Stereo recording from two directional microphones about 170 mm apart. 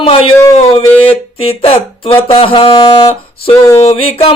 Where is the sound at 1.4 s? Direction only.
35° left (ahead or behind).